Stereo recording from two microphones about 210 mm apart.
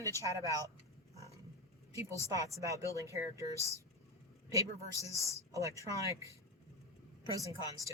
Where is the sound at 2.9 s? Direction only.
15° right (ahead or behind).